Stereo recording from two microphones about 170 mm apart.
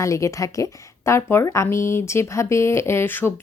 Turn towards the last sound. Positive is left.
turn(degrees=10)  # may be behind; listen again after turning